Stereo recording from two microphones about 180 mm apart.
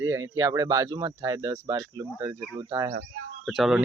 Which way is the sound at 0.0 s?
20° right (ahead or behind).